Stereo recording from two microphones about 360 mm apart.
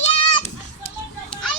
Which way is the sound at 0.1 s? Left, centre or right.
Centre.